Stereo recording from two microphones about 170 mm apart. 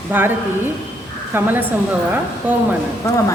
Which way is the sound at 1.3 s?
10° right (ahead or behind).